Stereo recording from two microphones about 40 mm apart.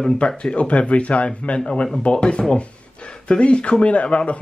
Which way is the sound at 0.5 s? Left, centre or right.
Left.